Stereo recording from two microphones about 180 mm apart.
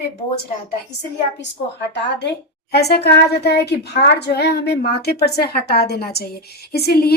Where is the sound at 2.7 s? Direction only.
65° left (ahead or behind).